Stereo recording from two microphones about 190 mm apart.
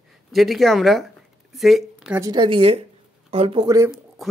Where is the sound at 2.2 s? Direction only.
25° right (ahead or behind).